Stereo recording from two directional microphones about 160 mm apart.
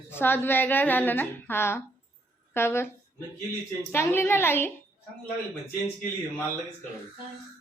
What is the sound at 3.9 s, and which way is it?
Speech, 15° left (ahead or behind).